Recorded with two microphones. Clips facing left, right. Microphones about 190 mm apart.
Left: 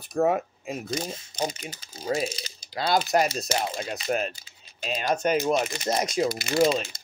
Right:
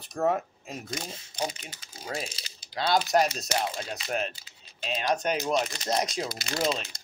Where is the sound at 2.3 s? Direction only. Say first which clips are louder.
Left 9 dB; 40° left (ahead or behind).